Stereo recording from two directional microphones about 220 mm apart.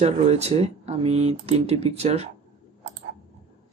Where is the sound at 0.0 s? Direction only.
30° right (ahead or behind).